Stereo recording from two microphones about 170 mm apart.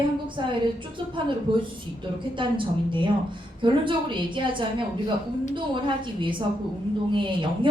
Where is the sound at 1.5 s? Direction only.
30° right (ahead or behind).